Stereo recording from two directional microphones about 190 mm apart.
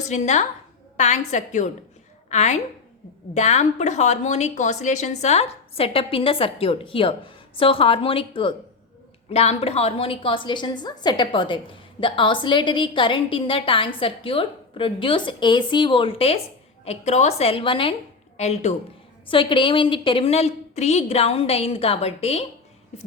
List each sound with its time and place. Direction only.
0.1 s a woman's voice: 40° left (ahead or behind)